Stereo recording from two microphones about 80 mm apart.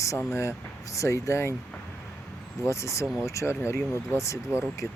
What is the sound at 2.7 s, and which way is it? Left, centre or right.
Speech, left.